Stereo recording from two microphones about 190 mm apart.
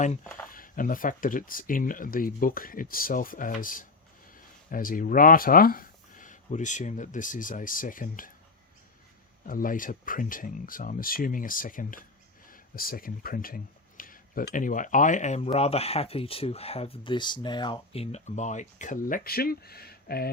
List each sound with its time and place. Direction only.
0.5 s speech: 45° left (ahead or behind)
9.5 s speech: 45° left (ahead or behind)